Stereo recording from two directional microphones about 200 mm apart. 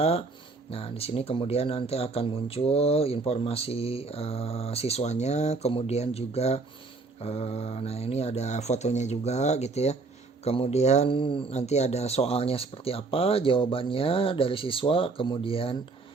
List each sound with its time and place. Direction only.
0.0 s speech: 30° left (ahead or behind)